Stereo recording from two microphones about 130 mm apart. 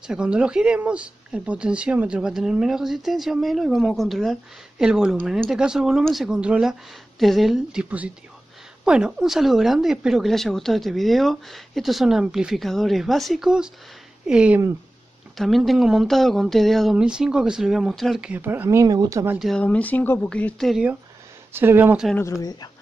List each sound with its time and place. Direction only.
0.0 s speech: 5° right (ahead or behind); by 19.2 s 30° right (ahead or behind)
19.3 s speech: centre (ahead or behind)
19.6 s speech: 10° left (ahead or behind)
21.5 s speech: 15° right (ahead or behind)
22.1 s speech: 25° left (ahead or behind)